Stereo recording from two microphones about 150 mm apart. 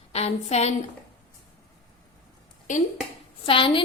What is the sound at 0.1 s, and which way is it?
Speech, 45° left (ahead or behind).